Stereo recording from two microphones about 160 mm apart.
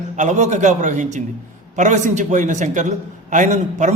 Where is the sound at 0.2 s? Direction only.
45° right (ahead or behind).